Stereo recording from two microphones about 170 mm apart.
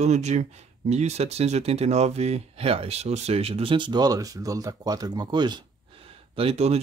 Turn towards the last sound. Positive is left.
turn(degrees=-35)  # may be behind; listen again after turning